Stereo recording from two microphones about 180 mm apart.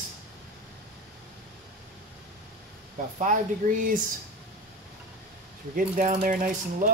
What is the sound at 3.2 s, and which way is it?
Speech, 45° right (ahead or behind).